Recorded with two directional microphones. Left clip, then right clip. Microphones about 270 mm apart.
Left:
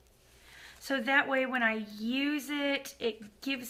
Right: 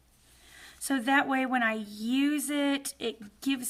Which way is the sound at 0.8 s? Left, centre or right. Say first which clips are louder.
Right 2 dB; right.